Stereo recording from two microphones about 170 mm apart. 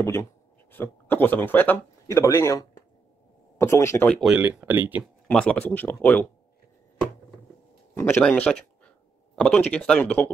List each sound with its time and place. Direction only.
0.0 s speech: 15° left (ahead or behind)
4.2 s speech: 5° right (ahead or behind)
5.3 s speech: 5° left (ahead or behind)
7.9 s speech: 15° left (ahead or behind)